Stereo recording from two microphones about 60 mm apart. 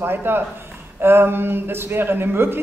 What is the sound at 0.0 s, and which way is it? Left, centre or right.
Speech, right.